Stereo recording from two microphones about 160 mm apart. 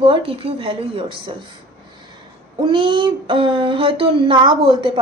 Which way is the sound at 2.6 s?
30° right (ahead or behind).